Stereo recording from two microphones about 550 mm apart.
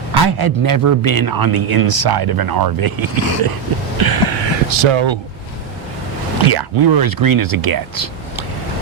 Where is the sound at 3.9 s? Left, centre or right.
Right.